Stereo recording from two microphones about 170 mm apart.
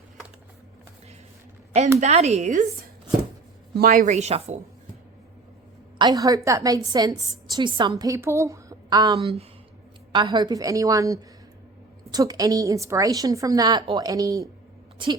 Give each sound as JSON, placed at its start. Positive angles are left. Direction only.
{"t": 2.0, "sound": "speech", "side_deg": -40}
{"t": 3.8, "sound": "a woman's voice", "side_deg": -60}
{"t": 4.1, "sound": "speech", "side_deg": -40}
{"t": 6.0, "sound": "a woman's voice", "side_deg": -20}
{"t": 9.2, "sound": "a woman's voice", "side_deg": -35}